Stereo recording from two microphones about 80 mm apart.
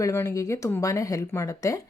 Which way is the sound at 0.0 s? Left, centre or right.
Left.